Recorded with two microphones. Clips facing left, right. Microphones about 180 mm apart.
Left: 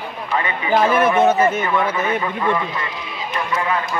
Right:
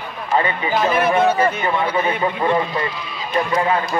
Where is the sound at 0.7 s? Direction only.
45° left (ahead or behind).